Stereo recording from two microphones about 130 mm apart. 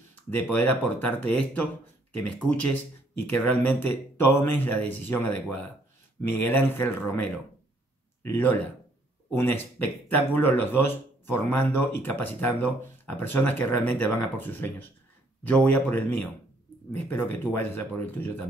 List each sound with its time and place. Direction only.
0.1 s speech: 15° left (ahead or behind)
8.2 s speech: 15° left (ahead or behind)